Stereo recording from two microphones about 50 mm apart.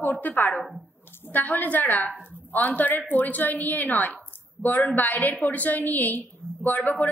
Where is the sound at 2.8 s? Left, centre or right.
Left.